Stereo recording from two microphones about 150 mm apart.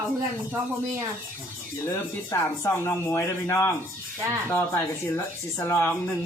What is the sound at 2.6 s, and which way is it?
A man's voice, 15° left (ahead or behind).